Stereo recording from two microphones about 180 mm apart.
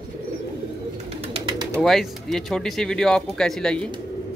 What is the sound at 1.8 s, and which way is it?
Speech, centre (ahead or behind).